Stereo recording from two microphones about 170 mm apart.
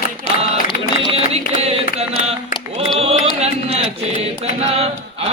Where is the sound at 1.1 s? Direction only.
35° right (ahead or behind).